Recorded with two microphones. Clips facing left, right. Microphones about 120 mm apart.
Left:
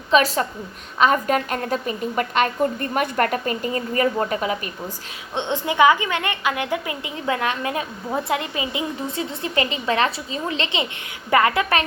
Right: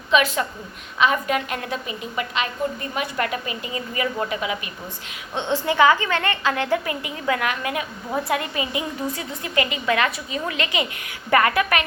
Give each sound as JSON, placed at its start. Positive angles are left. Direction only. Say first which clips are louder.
{"t": 0.1, "sound": "a woman's voice", "louder": "left 2 dB", "side_deg": 40}
{"t": 5.3, "sound": "a woman's voice", "louder": "right 1 dB", "side_deg": 20}